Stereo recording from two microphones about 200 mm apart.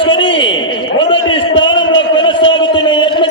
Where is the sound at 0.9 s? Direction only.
25° left (ahead or behind).